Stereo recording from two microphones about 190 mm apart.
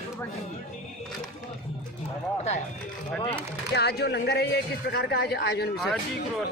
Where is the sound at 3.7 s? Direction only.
60° left (ahead or behind).